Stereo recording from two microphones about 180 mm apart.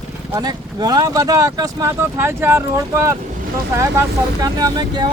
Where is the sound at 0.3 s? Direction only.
20° right (ahead or behind).